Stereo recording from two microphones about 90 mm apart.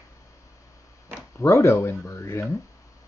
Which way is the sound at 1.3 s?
30° left (ahead or behind).